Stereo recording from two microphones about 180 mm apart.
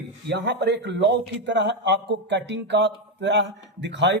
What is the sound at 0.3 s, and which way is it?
Speech, 70° right (ahead or behind).